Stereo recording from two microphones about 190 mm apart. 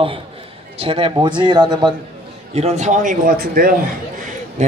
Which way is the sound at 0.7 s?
30° right (ahead or behind).